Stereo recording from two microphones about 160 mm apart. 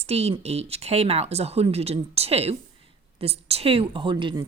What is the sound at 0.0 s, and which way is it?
Speech, 40° right (ahead or behind).